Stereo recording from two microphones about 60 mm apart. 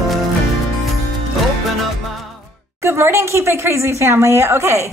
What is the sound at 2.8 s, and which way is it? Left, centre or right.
A woman's voice, right.